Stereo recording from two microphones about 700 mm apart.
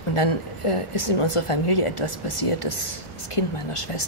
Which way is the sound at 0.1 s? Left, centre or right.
Left.